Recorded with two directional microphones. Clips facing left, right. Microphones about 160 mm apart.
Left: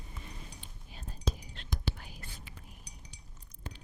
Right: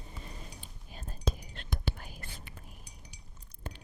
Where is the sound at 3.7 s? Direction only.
50° right (ahead or behind).